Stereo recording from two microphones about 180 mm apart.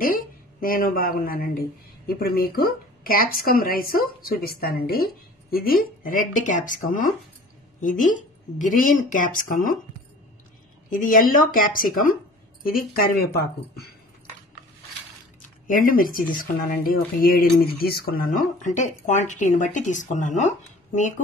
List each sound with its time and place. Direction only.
0.0 s a woman's voice: 55° left (ahead or behind)
10.9 s speech: 50° left (ahead or behind)
15.6 s speech: 50° left (ahead or behind)